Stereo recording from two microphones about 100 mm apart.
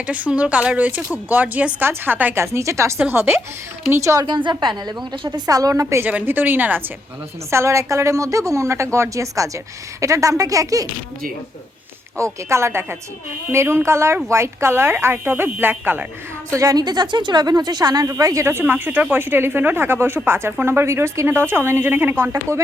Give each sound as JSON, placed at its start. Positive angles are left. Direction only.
{"t": 0.1, "sound": "speech", "side_deg": -15}
{"t": 4.3, "sound": "a woman's voice", "side_deg": -50}
{"t": 5.3, "sound": "speech", "side_deg": -35}
{"t": 6.1, "sound": "speech", "side_deg": -15}
{"t": 7.5, "sound": "speech", "side_deg": -30}
{"t": 12.1, "sound": "speech", "side_deg": -30}
{"t": 16.6, "sound": "speech", "side_deg": -40}